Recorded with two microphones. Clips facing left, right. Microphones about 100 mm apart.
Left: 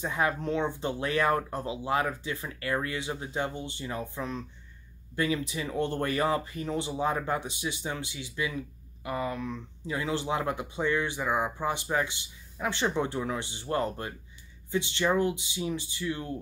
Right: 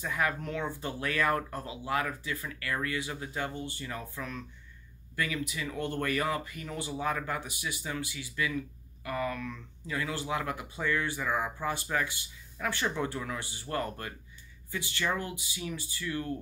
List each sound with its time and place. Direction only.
0.0 s speech: 25° left (ahead or behind)